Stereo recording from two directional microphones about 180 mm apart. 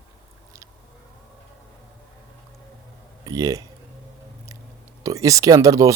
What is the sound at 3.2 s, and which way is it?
Speech, 20° right (ahead or behind).